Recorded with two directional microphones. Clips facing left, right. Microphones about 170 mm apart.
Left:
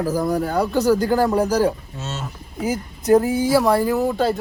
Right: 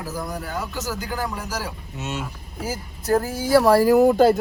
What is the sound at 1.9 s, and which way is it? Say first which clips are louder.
Speech: right 1 dB; 15° right (ahead or behind).